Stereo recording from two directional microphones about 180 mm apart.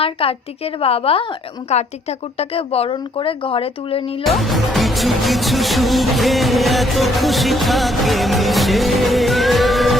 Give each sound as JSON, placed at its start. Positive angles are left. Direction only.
{"t": 0.0, "sound": "a woman's voice", "side_deg": 30}
{"t": 4.2, "sound": "music", "side_deg": 0}